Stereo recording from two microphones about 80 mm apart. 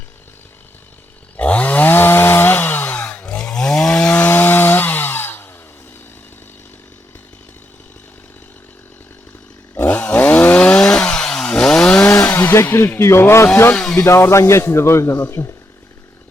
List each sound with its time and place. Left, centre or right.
1.4 s chainsaw: centre
4.1 s chainsaw: left
9.7 s chainsaw: left; by 12.0 s centre
12.3 s speech: left
13.7 s speech: centre
14.0 s a man's voice: left
15.2 s speech: left